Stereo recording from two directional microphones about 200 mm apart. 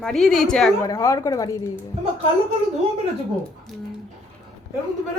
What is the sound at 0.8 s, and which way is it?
Speech, 15° left (ahead or behind).